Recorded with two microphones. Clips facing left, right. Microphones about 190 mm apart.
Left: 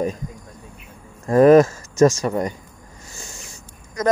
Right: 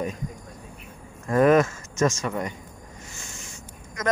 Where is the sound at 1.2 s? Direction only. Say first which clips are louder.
Left 7 dB; 35° left (ahead or behind).